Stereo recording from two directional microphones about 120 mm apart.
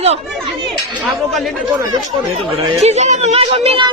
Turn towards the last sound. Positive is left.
turn(degrees=-60)  # may be behind; listen again after turning